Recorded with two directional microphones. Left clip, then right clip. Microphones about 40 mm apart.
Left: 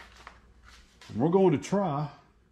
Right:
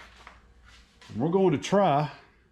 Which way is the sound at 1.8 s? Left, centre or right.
Left.